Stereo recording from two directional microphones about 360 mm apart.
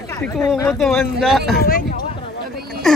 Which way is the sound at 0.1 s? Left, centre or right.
Centre.